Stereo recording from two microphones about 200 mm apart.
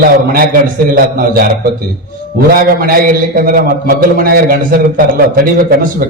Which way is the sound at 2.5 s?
45° right (ahead or behind).